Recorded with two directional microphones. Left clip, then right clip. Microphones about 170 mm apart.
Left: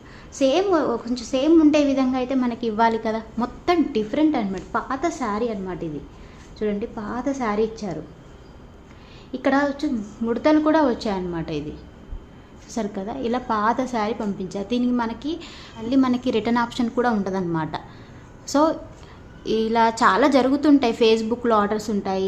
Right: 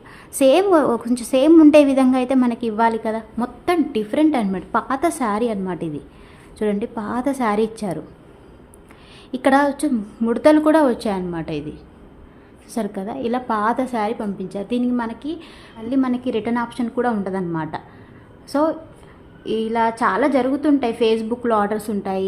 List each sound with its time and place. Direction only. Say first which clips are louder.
0.3 s a woman's voice: right 5 dB; 35° right (ahead or behind)
9.3 s a woman's voice: right 5 dB; 30° right (ahead or behind)
12.7 s a woman's voice: right 2 dB; 20° right (ahead or behind)